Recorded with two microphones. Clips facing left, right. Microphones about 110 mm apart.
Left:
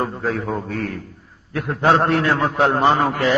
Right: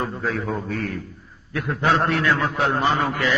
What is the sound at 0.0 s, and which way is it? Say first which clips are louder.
A man's voice: left 3 dB; 40° left (ahead or behind).